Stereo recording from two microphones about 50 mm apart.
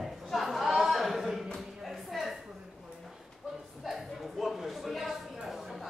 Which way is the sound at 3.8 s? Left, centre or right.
Centre.